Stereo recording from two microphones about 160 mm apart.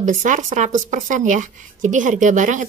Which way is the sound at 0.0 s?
50° right (ahead or behind).